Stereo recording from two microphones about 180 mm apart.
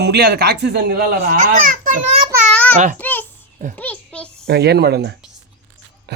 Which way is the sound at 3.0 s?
10° left (ahead or behind).